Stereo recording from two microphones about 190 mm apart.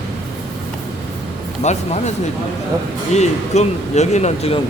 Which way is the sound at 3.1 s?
35° left (ahead or behind).